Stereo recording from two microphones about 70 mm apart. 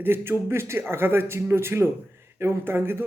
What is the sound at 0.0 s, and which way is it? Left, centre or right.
Speech, right.